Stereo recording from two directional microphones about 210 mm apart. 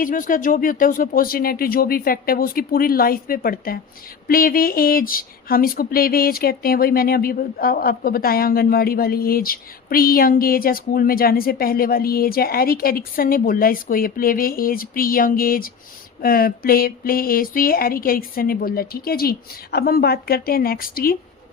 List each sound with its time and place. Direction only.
0.0 s speech: 40° left (ahead or behind)